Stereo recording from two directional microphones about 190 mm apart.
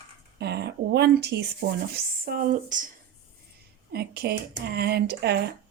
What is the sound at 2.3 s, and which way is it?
Speech, 45° right (ahead or behind).